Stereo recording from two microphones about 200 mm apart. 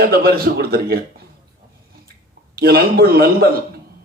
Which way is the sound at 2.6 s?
50° right (ahead or behind).